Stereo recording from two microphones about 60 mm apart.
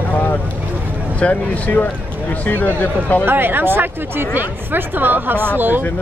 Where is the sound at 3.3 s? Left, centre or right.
Right.